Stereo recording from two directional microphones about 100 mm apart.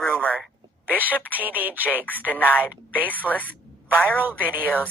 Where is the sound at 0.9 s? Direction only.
20° right (ahead or behind).